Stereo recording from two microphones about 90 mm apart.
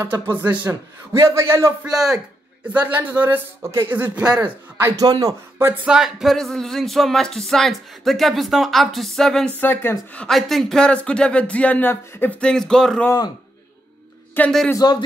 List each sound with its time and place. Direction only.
0.0 s a man's voice: 25° right (ahead or behind)
1.9 s a man's voice: 5° right (ahead or behind)
2.7 s a man's voice: 20° right (ahead or behind)
4.4 s a man's voice: 30° right (ahead or behind)
5.0 s speech: 45° right (ahead or behind)
5.9 s speech: 5° right (ahead or behind)
9.6 s speech: 25° left (ahead or behind)
10.2 s speech: 5° left (ahead or behind); by 12.4 s 25° left (ahead or behind)
12.4 s speech: 10° left (ahead or behind)
14.4 s speech: 25° left (ahead or behind)
14.8 s a man's voice: 50° left (ahead or behind)